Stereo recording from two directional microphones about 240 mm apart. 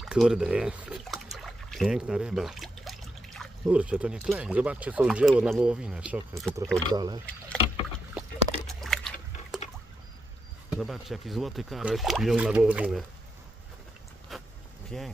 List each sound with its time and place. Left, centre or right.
0.0 s speech: centre
6.9 s speech: centre
8.1 s a sound: centre
10.7 s speech: centre
14.3 s a sound: centre
14.9 s speech: centre